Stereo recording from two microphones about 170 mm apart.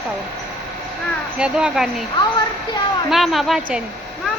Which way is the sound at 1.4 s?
5° right (ahead or behind).